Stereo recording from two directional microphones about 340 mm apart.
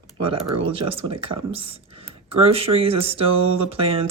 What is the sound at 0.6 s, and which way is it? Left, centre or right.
Speech, centre.